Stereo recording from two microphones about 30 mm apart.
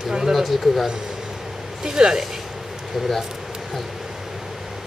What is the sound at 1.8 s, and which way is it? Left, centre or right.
Speech, right.